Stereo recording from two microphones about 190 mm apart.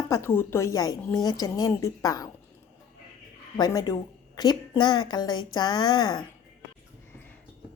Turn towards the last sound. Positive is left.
turn(degrees=25)  # may be behind; listen again after turning